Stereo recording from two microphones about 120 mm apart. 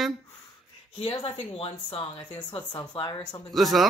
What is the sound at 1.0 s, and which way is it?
A woman's voice, 45° left (ahead or behind).